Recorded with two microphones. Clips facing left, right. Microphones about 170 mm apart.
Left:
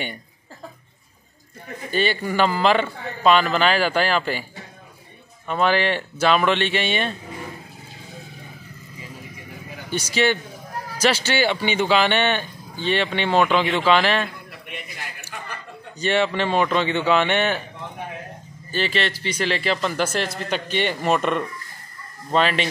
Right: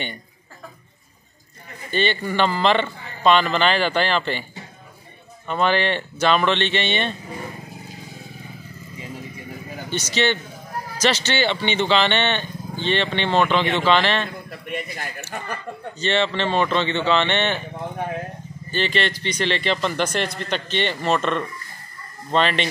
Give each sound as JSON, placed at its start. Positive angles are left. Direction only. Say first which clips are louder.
{"t": 1.9, "sound": "speech", "louder": "even", "side_deg": 5}
{"t": 5.5, "sound": "speech", "louder": "even", "side_deg": 5}
{"t": 9.8, "sound": "speech", "louder": "left 1 dB", "side_deg": 10}
{"t": 14.7, "sound": "speech", "louder": "right 7 dB", "side_deg": -45}
{"t": 16.0, "sound": "speech", "louder": "left 1 dB", "side_deg": 10}
{"t": 18.7, "sound": "speech", "louder": "right 1 dB", "side_deg": 5}